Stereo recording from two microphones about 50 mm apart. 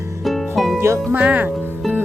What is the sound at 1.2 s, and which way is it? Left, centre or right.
Speech, right.